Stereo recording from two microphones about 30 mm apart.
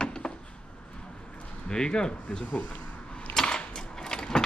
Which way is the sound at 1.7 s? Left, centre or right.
Left.